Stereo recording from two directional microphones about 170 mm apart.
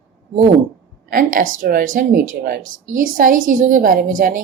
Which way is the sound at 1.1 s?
55° right (ahead or behind).